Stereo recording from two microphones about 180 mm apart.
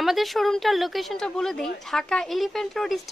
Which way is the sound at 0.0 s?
Centre (ahead or behind).